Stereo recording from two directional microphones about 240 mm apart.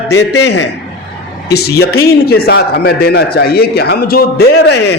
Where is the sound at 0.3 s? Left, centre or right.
Left.